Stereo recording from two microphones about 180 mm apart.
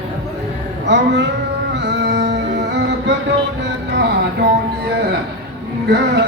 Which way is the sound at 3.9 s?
70° right (ahead or behind).